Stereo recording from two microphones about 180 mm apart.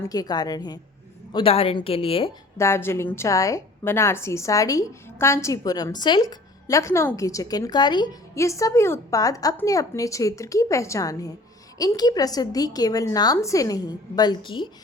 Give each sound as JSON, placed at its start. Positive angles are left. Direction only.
{"t": 0.1, "sound": "a woman's voice", "side_deg": 20}
{"t": 2.6, "sound": "a woman's voice", "side_deg": 15}